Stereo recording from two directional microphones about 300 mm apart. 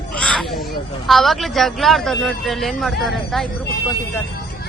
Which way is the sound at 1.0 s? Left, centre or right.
Centre.